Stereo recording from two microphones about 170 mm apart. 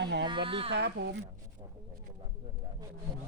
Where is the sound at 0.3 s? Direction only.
30° right (ahead or behind).